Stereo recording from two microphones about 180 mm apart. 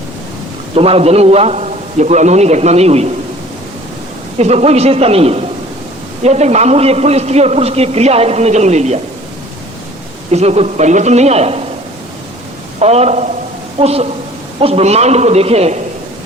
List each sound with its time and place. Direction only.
0.8 s a man's voice: 35° right (ahead or behind)
4.4 s a man's voice: 35° right (ahead or behind)
10.3 s a man's voice: 35° right (ahead or behind)
12.8 s a man's voice: 35° right (ahead or behind)